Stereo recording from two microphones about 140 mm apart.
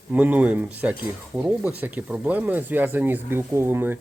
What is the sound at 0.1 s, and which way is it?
Speech, 10° right (ahead or behind).